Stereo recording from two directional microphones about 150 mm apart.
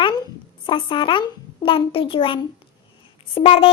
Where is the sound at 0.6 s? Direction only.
35° left (ahead or behind).